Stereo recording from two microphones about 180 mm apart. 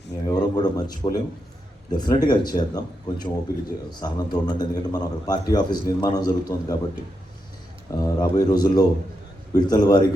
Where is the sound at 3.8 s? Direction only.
20° left (ahead or behind).